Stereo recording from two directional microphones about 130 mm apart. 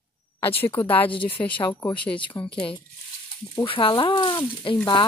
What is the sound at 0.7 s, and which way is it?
Speech, 15° left (ahead or behind).